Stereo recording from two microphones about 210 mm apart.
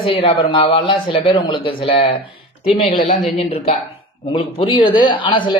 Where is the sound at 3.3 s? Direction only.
30° left (ahead or behind).